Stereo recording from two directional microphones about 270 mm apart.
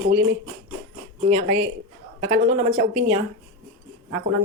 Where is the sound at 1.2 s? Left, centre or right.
Right.